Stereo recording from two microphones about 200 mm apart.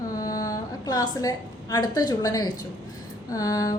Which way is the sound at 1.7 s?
20° left (ahead or behind).